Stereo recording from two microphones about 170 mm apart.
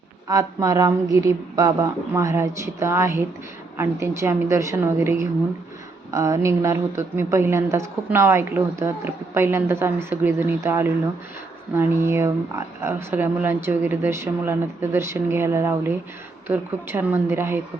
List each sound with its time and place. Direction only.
0.3 s a woman's voice: 20° right (ahead or behind)